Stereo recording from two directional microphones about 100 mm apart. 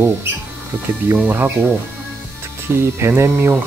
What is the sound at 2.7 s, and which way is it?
Speech, 25° right (ahead or behind).